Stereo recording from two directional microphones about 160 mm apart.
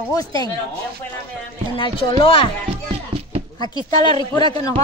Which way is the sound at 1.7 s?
30° left (ahead or behind).